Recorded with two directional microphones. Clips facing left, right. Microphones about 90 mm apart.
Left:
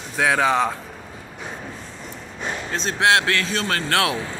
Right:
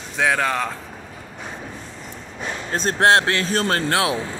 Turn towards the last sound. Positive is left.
turn(degrees=-20)  # may be behind; listen again after turning